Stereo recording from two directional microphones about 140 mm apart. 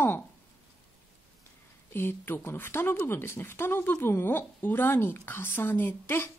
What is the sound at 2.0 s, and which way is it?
Speech, 15° left (ahead or behind).